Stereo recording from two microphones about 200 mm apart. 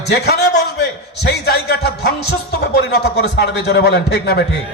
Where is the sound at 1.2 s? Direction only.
55° left (ahead or behind).